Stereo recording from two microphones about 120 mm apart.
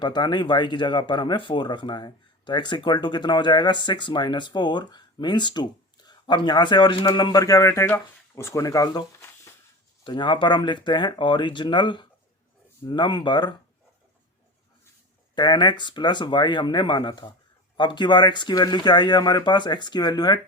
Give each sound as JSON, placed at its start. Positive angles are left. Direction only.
{"t": 0.0, "sound": "speech", "side_deg": 40}
{"t": 15.4, "sound": "speech", "side_deg": 40}